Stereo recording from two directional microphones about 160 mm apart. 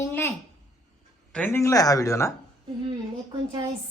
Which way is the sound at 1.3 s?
10° left (ahead or behind).